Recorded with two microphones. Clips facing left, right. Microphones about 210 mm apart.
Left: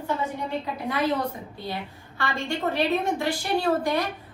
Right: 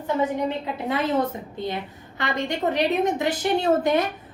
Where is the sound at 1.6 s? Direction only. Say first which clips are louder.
Right 5 dB; 20° right (ahead or behind).